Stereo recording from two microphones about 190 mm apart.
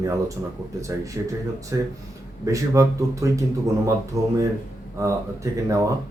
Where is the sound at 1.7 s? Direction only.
15° right (ahead or behind).